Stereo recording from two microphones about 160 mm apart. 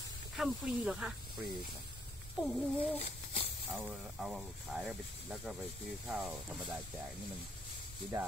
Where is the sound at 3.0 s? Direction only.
40° left (ahead or behind).